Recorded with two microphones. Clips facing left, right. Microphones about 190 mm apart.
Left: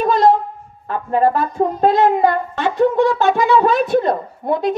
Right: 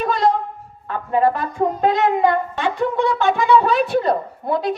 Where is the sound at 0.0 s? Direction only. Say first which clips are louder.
Left 4 dB; 45° left (ahead or behind).